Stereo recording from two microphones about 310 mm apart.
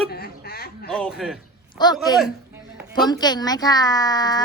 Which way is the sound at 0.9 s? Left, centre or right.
Centre.